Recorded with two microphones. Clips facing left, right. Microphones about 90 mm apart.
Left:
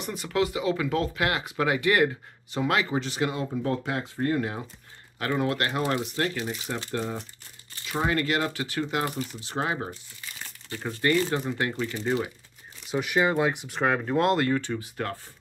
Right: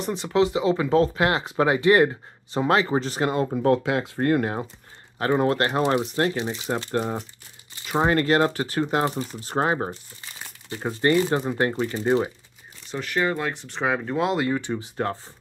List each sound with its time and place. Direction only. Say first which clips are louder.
0.0 s speech: right 5 dB; 25° right (ahead or behind); by 3.7 s 50° right (ahead or behind)
3.7 s speech: right 7 dB; 90° right; by 4.6 s 45° right (ahead or behind)
5.2 s speech: right 5 dB; 35° right (ahead or behind)
8.0 s speech: right 6 dB; 40° right (ahead or behind)
10.9 s speech: right 4 dB; 25° right (ahead or behind)
12.8 s speech: left 1 dB; 10° left (ahead or behind)
13.7 s speech: right 1 dB; centre (ahead or behind); by 15.1 s 25° right (ahead or behind)